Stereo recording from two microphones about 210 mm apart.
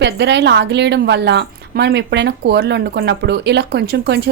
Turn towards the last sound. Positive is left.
turn(degrees=-50)  # may be behind; listen again after turning